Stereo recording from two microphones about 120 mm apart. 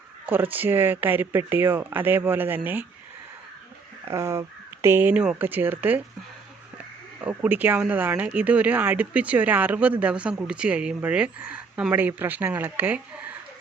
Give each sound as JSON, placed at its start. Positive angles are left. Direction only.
{"t": 0.3, "sound": "speech", "side_deg": -15}
{"t": 4.0, "sound": "speech", "side_deg": -25}
{"t": 7.2, "sound": "speech", "side_deg": -15}